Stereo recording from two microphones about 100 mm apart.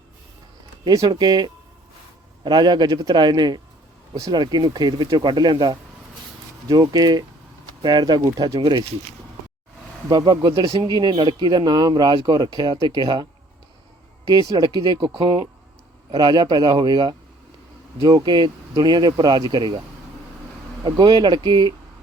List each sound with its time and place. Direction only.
0.9 s speech: 40° right (ahead or behind)
8.5 s speech: 60° right (ahead or behind)
10.1 s speech: 45° right (ahead or behind)
14.5 s speech: 45° right (ahead or behind)
20.8 s speech: 45° right (ahead or behind)